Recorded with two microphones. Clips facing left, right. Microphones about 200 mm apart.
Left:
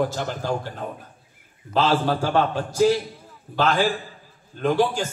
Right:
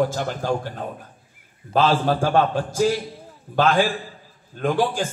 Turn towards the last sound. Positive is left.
turn(degrees=-50)  # may be behind; listen again after turning